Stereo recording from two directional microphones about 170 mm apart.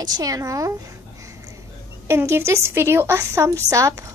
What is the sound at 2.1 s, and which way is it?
A woman's voice, 15° right (ahead or behind).